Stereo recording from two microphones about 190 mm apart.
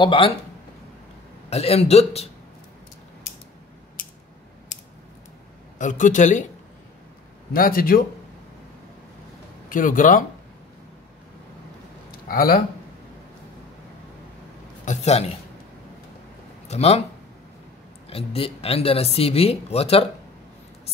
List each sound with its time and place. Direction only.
0.0 s speech: 25° left (ahead or behind)
1.5 s speech: 35° left (ahead or behind)
5.8 s speech: 40° left (ahead or behind)
7.5 s speech: 50° left (ahead or behind)
9.7 s speech: 45° left (ahead or behind)
12.1 s a sound: 50° left (ahead or behind)
14.9 s speech: 35° left (ahead or behind)
16.6 s speech: 35° left (ahead or behind)
18.1 s speech: 30° left (ahead or behind)